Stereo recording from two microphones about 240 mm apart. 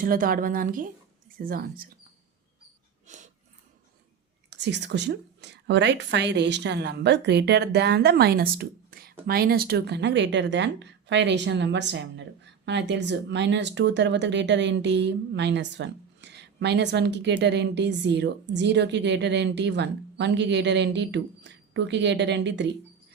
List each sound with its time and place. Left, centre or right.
0.0 s a woman's voice: right
3.1 s dog: right
4.4 s a woman's voice: right